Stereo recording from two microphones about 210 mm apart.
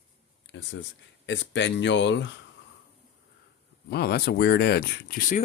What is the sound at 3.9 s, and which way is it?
Speech, 50° left (ahead or behind).